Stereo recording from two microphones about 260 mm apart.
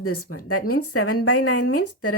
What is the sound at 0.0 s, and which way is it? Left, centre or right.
Speech, left.